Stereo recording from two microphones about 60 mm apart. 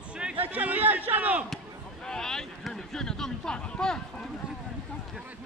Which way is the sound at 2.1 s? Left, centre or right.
Centre.